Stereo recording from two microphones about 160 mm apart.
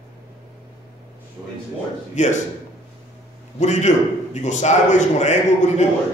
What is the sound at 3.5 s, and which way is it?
A man's voice, 45° left (ahead or behind).